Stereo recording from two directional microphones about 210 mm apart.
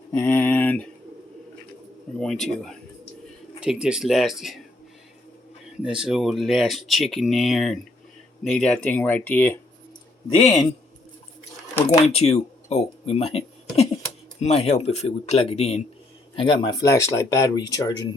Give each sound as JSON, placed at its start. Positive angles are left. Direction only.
{"t": 0.1, "sound": "speech", "side_deg": 10}
{"t": 2.1, "sound": "speech", "side_deg": 0}
{"t": 5.8, "sound": "speech", "side_deg": -5}
{"t": 10.2, "sound": "speech", "side_deg": 20}
{"t": 12.0, "sound": "speech", "side_deg": 30}